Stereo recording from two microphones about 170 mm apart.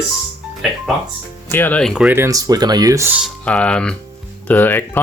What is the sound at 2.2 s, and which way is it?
Speech, 20° right (ahead or behind).